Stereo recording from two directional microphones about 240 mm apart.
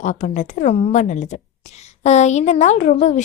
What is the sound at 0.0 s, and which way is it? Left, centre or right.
A woman's voice, left.